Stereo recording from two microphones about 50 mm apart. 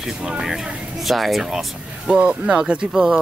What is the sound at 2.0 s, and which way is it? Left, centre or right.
Speech, right.